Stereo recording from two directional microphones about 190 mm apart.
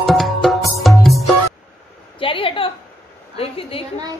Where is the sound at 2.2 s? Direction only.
30° left (ahead or behind).